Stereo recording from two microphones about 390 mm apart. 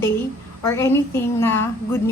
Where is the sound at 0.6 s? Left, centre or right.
Centre.